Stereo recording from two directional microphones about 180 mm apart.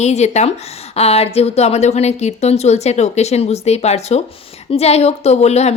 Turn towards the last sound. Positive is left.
turn(degrees=35)  # may be behind; listen again after turning